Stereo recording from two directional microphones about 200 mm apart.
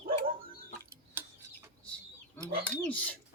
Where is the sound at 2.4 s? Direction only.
10° left (ahead or behind).